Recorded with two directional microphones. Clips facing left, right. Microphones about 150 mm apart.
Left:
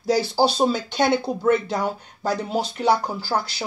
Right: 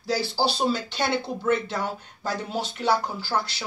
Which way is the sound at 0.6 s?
45° left (ahead or behind).